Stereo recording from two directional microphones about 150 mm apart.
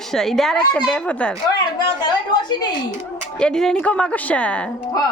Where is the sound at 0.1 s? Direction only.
Centre (ahead or behind).